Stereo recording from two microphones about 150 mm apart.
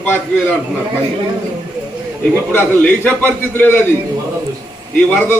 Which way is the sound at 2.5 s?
10° left (ahead or behind).